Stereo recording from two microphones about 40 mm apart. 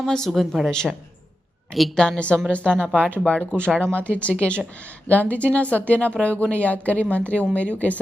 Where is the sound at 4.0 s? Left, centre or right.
Left.